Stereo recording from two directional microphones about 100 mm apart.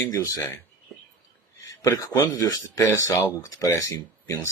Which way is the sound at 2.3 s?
35° left (ahead or behind).